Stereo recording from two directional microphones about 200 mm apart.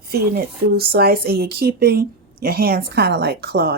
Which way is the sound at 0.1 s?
50° right (ahead or behind).